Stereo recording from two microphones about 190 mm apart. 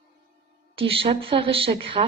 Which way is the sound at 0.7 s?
30° right (ahead or behind).